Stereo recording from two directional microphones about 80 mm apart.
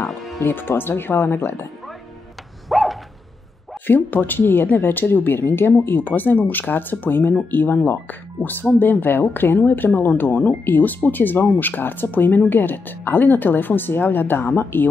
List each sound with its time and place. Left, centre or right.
0.0 s speech: left
2.7 s a sound: centre
3.8 s speech: left